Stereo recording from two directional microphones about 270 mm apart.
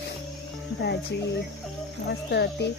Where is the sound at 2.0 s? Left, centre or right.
Left.